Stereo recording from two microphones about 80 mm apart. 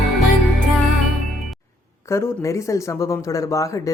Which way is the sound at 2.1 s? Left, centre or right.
Left.